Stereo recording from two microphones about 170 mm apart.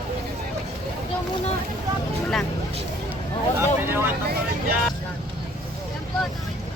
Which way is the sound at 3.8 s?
15° right (ahead or behind).